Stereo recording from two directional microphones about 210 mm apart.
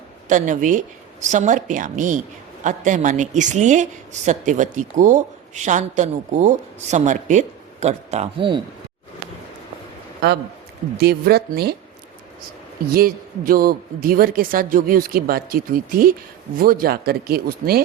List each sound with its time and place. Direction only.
0.3 s a woman's voice: 35° right (ahead or behind)
10.2 s a woman's voice: 50° right (ahead or behind)
12.9 s a woman's voice: 45° right (ahead or behind)